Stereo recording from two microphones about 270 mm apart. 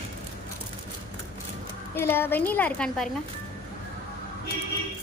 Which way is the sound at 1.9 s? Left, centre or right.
Centre.